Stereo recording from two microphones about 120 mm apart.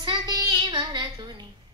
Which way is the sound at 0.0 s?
35° right (ahead or behind).